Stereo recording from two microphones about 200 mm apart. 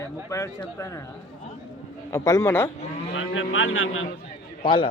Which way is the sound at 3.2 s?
75° left (ahead or behind).